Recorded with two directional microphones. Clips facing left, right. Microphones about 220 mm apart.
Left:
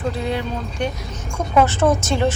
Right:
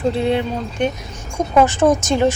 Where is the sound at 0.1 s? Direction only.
25° right (ahead or behind).